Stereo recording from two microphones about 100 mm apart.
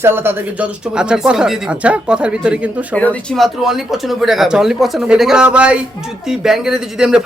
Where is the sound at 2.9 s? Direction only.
15° left (ahead or behind).